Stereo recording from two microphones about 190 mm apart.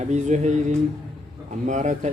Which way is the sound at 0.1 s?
40° right (ahead or behind).